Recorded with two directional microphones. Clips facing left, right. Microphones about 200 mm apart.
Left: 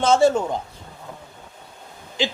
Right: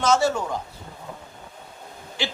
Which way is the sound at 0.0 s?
25° left (ahead or behind).